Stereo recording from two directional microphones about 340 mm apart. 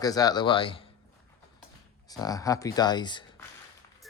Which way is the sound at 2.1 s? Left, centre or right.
Centre.